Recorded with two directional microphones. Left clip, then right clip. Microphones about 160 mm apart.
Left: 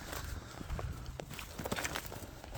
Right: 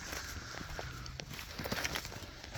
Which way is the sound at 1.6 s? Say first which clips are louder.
Right 1 dB; centre (ahead or behind).